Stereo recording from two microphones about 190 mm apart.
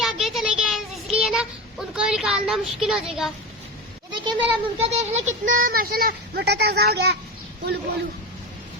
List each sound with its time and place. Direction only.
0.0 s child singing: centre (ahead or behind)
2.0 s speech: 5° right (ahead or behind)
4.1 s speech: 25° right (ahead or behind); by 7.2 s 60° right (ahead or behind)